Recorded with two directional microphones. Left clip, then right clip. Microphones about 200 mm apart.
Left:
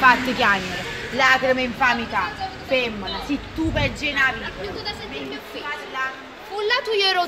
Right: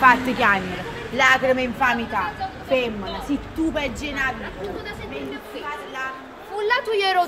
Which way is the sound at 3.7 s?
45° right (ahead or behind).